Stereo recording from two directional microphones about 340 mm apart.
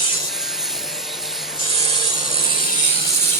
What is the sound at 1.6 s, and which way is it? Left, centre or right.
Wood, centre.